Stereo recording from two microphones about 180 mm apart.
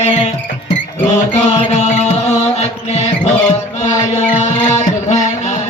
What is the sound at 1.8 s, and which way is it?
Music, 40° left (ahead or behind).